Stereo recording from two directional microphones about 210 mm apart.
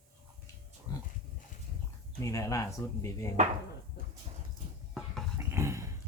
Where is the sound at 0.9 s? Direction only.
20° left (ahead or behind).